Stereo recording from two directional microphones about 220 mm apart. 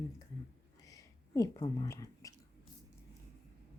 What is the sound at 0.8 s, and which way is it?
Chewing, 15° left (ahead or behind).